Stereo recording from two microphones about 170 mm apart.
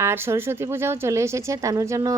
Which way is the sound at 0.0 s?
15° right (ahead or behind).